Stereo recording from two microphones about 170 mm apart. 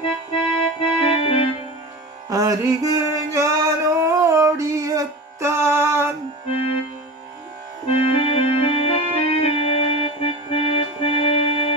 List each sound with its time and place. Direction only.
0.0 s keyboard: 30° left (ahead or behind)
2.2 s music: 20° right (ahead or behind)
7.8 s music: 35° left (ahead or behind)